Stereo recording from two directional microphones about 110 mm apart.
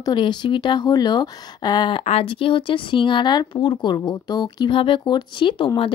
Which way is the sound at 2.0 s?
60° left (ahead or behind).